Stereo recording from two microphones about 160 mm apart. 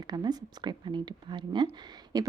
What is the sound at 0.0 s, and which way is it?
A woman's voice, 25° right (ahead or behind).